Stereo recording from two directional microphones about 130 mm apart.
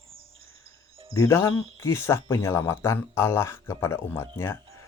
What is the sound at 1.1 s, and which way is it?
Speech, 25° left (ahead or behind).